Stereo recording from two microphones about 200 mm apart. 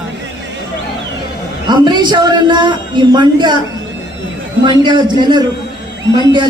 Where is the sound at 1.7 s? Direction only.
20° right (ahead or behind).